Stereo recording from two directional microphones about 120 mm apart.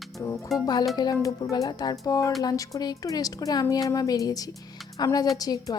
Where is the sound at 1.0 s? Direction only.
35° left (ahead or behind).